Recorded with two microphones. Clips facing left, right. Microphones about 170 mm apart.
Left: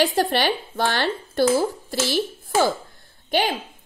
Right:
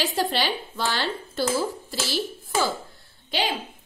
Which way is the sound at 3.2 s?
50° left (ahead or behind).